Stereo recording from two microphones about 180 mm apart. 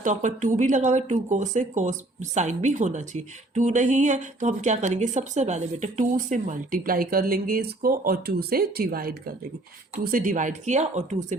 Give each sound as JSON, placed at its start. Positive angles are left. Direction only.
{"t": 0.0, "sound": "a woman's voice", "side_deg": -45}